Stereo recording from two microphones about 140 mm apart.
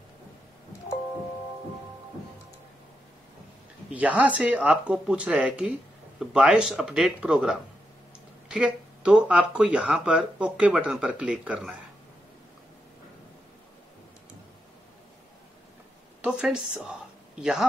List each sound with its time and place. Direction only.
3.9 s speech: 10° right (ahead or behind)
16.2 s speech: 5° right (ahead or behind)